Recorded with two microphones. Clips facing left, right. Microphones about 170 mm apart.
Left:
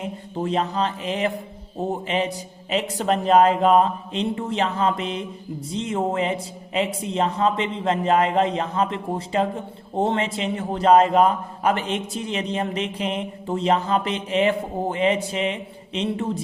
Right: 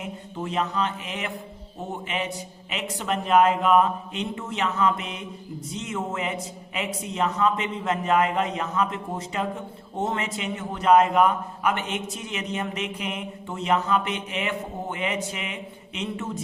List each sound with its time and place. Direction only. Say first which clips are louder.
0.0 s a man's voice: left 5 dB; 35° left (ahead or behind)